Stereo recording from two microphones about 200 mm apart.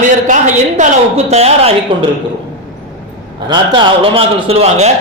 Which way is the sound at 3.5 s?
25° right (ahead or behind).